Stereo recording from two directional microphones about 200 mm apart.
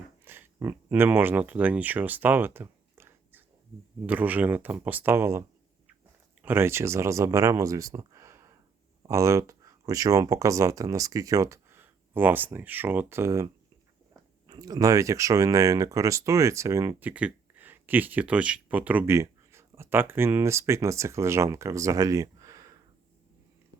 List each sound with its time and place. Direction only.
0.3 s speech: 10° right (ahead or behind)